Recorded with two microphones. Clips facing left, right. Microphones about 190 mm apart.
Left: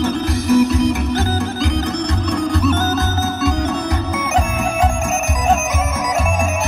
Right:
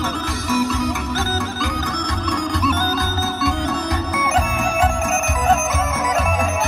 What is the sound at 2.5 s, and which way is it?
Music, 25° left (ahead or behind).